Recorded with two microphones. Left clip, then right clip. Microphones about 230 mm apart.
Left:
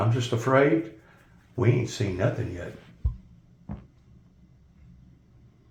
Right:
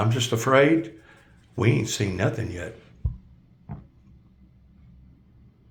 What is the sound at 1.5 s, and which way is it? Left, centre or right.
Speech, right.